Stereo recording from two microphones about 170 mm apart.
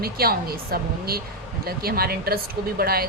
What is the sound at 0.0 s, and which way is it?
A woman's voice, 65° right (ahead or behind).